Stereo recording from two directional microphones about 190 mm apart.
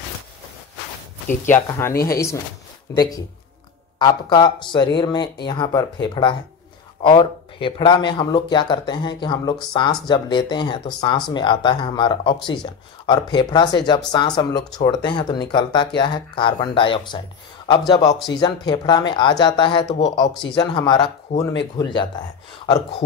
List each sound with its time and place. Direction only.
1.5 s speech: 15° left (ahead or behind)
21.3 s speech: 35° left (ahead or behind)
21.7 s speech: 25° left (ahead or behind)